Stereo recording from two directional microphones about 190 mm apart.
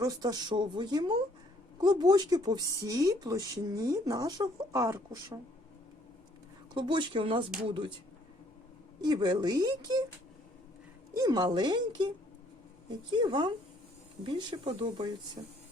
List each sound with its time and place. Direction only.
0.0 s speech: 20° right (ahead or behind)
6.7 s speech: 25° right (ahead or behind)
9.0 s speech: 20° right (ahead or behind)
11.1 s speech: 20° right (ahead or behind)
13.2 s speech: 25° right (ahead or behind)